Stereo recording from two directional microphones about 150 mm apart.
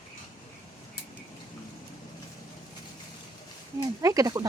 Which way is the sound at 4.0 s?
20° right (ahead or behind).